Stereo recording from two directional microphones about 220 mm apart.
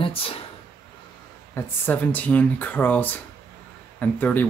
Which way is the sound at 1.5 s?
10° left (ahead or behind).